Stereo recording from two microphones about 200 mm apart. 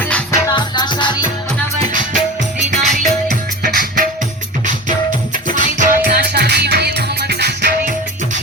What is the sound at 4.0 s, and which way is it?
Music, 40° right (ahead or behind).